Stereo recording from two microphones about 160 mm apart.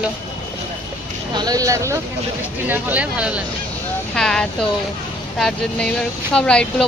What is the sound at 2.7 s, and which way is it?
Speech, 10° right (ahead or behind).